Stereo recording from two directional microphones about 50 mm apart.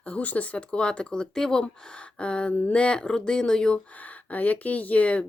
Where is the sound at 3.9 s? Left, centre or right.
Left.